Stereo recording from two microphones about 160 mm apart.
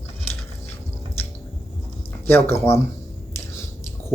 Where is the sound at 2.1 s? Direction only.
15° left (ahead or behind).